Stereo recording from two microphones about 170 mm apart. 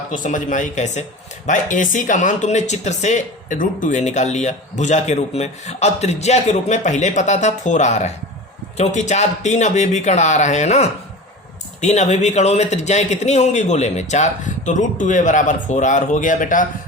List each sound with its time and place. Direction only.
0.1 s speech: 50° left (ahead or behind)